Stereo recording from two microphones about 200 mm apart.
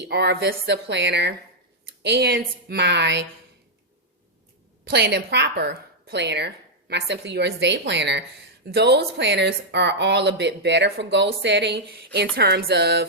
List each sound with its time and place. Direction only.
0.0 s a woman's voice: 55° right (ahead or behind)
4.9 s a woman's voice: 55° right (ahead or behind)